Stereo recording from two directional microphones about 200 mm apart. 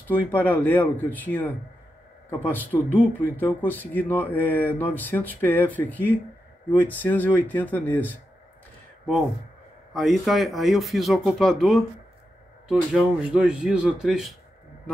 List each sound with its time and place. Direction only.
0.1 s speech: 10° left (ahead or behind)
9.9 s speech: centre (ahead or behind)